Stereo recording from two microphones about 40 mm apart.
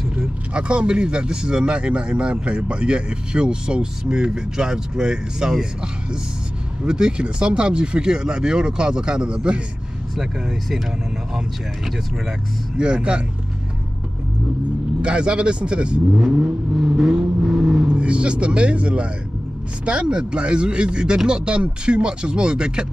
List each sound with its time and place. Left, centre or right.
0.6 s speech: right
12.7 s speech: right
15.0 s speech: right
16.9 s vehicle: centre
17.8 s speech: right